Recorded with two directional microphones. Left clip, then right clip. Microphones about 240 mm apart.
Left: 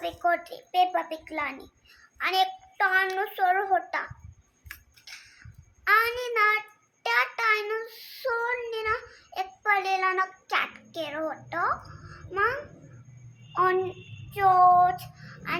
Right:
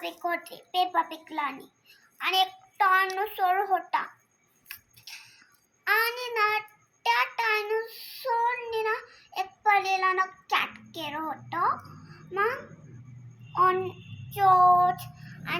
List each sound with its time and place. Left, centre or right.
0.0 s a child's voice: centre
4.7 s a sound: centre
7.0 s child singing: centre
13.5 s a child's voice: centre
14.3 s child singing: centre